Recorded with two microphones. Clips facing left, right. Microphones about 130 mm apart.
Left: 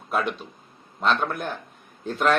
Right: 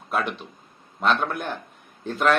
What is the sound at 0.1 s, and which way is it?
A man's voice, centre (ahead or behind).